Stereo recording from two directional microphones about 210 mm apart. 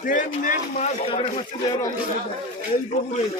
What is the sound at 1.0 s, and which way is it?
Speech, 25° left (ahead or behind).